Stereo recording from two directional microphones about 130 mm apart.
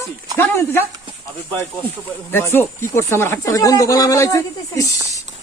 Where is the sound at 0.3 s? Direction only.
15° left (ahead or behind).